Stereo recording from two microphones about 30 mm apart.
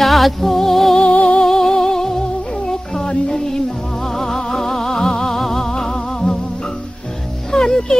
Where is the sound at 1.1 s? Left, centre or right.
Left.